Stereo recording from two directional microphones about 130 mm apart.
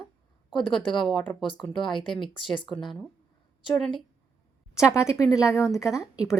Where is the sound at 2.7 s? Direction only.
Centre (ahead or behind).